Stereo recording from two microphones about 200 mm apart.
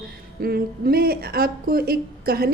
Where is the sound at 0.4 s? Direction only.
50° right (ahead or behind).